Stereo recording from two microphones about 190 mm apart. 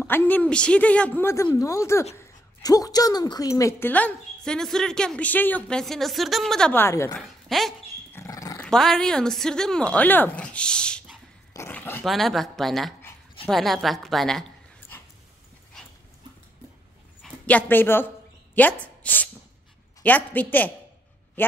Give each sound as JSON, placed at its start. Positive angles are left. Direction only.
{"t": 0.0, "sound": "a woman's voice", "side_deg": 10}
{"t": 7.2, "sound": "a woman's voice", "side_deg": 0}
{"t": 8.1, "sound": "dog", "side_deg": 15}
{"t": 8.5, "sound": "a woman's voice", "side_deg": 0}
{"t": 17.2, "sound": "a sound", "side_deg": 10}
{"t": 20.0, "sound": "a woman's voice", "side_deg": 10}